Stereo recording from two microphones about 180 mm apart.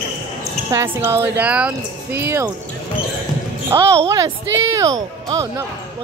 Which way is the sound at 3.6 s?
15° right (ahead or behind).